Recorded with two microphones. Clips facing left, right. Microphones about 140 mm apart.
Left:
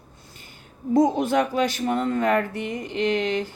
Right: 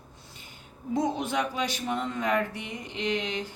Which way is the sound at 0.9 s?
50° left (ahead or behind).